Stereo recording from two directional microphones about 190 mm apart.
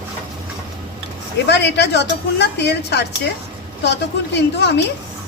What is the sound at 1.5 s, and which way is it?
A woman's voice, 65° left (ahead or behind).